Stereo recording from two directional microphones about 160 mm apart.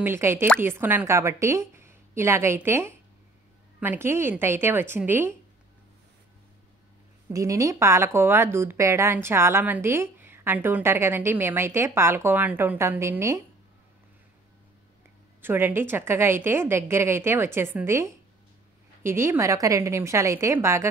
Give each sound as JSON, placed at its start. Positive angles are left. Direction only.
{"t": 0.0, "sound": "a woman's voice", "side_deg": -15}
{"t": 7.3, "sound": "a woman's voice", "side_deg": -20}
{"t": 15.4, "sound": "a woman's voice", "side_deg": -15}